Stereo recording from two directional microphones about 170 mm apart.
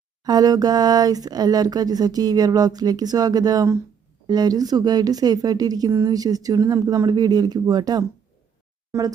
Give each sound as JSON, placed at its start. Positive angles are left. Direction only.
{"t": 0.3, "sound": "speech", "side_deg": -20}